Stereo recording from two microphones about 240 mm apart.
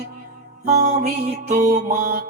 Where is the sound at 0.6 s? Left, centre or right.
Right.